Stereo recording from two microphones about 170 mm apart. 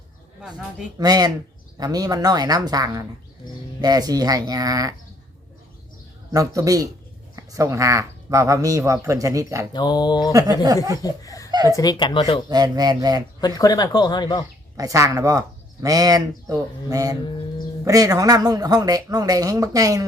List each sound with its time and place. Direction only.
0.9 s speech: 25° right (ahead or behind)
6.3 s speech: 20° right (ahead or behind)
9.7 s speech: 25° left (ahead or behind)
10.3 s speech: 20° right (ahead or behind)
11.0 s laughter: 20° left (ahead or behind)
11.5 s speech: 25° right (ahead or behind)
11.8 s speech: 25° left (ahead or behind)
12.5 s speech: 25° right (ahead or behind)
13.4 s speech: 20° left (ahead or behind)
14.8 s speech: 20° right (ahead or behind)